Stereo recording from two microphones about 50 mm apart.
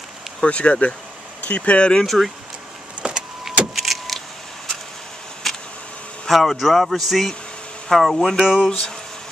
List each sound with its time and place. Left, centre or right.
0.4 s speech: left
2.0 s speech: centre
3.0 s vehicle: centre
3.7 s vehicle: centre
5.4 s vehicle: centre
6.2 s speech: centre
8.4 s speech: centre
8.6 s speech: centre